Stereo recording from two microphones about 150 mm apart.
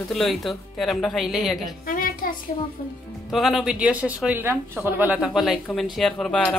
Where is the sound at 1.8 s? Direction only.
75° left (ahead or behind).